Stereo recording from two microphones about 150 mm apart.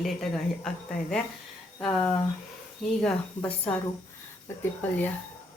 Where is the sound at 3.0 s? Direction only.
10° left (ahead or behind).